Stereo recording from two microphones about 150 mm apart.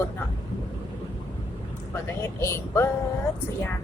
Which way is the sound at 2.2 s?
20° left (ahead or behind).